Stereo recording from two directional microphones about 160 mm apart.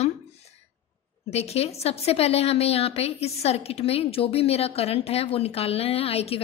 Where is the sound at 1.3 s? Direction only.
40° left (ahead or behind).